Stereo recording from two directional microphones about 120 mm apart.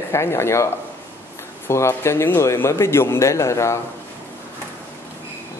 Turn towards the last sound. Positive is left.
turn(degrees=25)  # may be behind; listen again after turning